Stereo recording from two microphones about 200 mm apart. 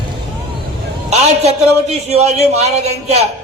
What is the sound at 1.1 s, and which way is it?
A man's voice, 30° right (ahead or behind).